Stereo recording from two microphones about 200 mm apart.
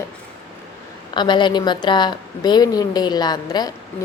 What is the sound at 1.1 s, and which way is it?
A woman's voice, 25° left (ahead or behind).